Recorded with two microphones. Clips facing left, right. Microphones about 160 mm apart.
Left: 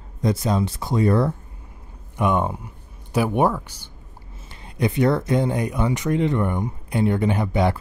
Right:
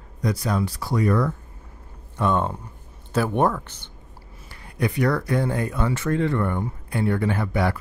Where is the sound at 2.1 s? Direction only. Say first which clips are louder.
Left 1 dB; 15° left (ahead or behind).